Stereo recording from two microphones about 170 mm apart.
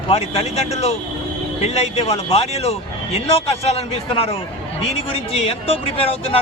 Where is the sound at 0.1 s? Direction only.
35° left (ahead or behind).